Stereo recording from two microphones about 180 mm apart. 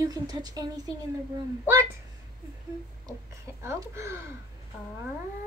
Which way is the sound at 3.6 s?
15° right (ahead or behind).